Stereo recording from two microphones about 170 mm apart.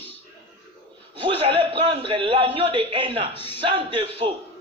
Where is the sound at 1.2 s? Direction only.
30° right (ahead or behind).